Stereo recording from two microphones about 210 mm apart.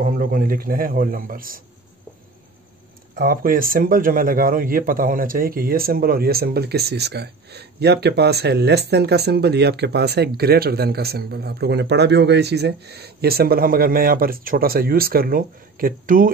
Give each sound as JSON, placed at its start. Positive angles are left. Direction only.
{"t": 0.0, "sound": "speech", "side_deg": -40}
{"t": 3.2, "sound": "speech", "side_deg": -45}